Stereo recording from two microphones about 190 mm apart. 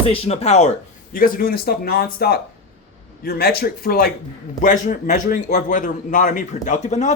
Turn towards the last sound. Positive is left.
turn(degrees=35)  # may be behind; listen again after turning